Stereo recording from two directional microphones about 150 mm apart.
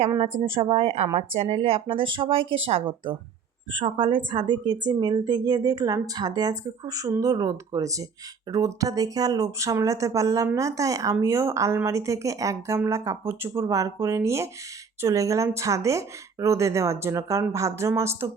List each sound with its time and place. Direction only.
0.2 s speech: 35° right (ahead or behind); by 18.3 s 15° right (ahead or behind)